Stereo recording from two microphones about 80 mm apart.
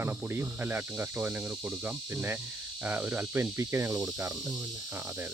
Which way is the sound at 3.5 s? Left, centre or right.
Right.